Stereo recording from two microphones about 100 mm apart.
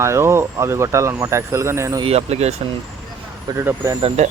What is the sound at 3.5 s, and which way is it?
Speech, 30° right (ahead or behind).